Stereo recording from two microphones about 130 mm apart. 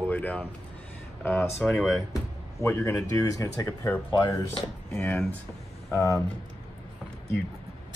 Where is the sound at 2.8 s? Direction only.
25° left (ahead or behind).